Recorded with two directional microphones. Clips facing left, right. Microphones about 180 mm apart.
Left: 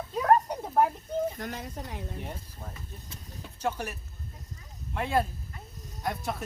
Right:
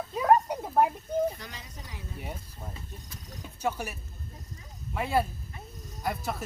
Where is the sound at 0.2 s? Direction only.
10° right (ahead or behind).